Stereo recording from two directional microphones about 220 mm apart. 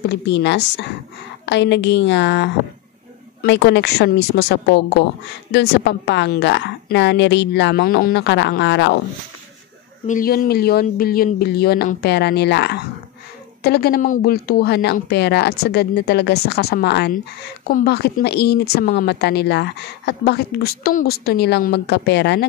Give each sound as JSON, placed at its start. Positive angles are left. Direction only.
{"t": 0.0, "sound": "speech", "side_deg": 50}
{"t": 10.0, "sound": "speech", "side_deg": 40}